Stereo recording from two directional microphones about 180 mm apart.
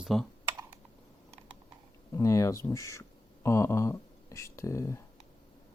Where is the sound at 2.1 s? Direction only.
15° left (ahead or behind).